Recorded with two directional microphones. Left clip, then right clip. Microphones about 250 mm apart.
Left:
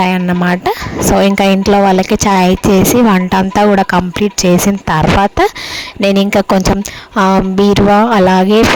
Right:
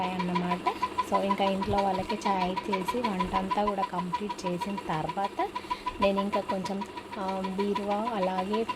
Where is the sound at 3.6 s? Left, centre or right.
Left.